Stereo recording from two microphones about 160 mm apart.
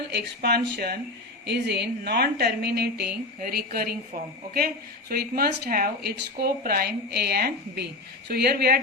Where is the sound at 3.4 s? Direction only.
65° right (ahead or behind).